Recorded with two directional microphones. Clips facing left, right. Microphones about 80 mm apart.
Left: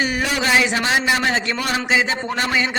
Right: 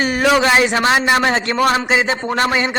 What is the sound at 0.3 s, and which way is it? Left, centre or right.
A man's voice, right.